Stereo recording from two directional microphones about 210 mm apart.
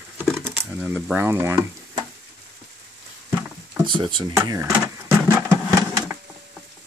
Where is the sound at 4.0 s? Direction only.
20° right (ahead or behind).